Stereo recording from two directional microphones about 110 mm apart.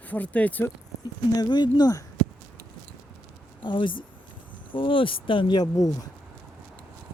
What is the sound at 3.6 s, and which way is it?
Speech, 50° left (ahead or behind).